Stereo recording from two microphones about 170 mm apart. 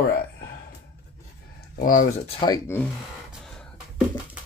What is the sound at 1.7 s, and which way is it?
Speech, 50° left (ahead or behind).